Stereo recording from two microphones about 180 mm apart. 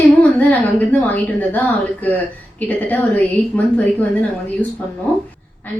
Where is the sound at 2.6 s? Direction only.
10° left (ahead or behind).